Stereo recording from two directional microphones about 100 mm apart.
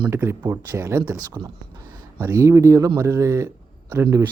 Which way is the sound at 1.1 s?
40° right (ahead or behind).